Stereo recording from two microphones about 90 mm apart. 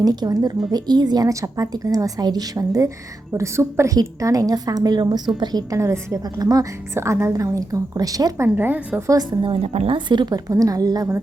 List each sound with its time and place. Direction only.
0.0 s a woman's voice: 45° right (ahead or behind)
5.8 s a woman's voice: 30° right (ahead or behind)
6.4 s a woman's voice: 40° right (ahead or behind)
6.9 s a woman's voice: 30° right (ahead or behind)
8.5 s a woman's voice: 25° right (ahead or behind)
9.0 s a woman's voice: 35° right (ahead or behind)
9.4 s a woman's voice: 80° right; by 10.4 s 55° right (ahead or behind)
10.5 s a woman's voice: 40° right (ahead or behind)